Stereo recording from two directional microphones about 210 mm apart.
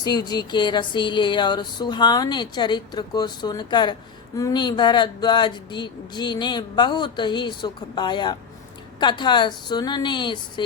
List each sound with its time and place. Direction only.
0.0 s speech: 20° left (ahead or behind)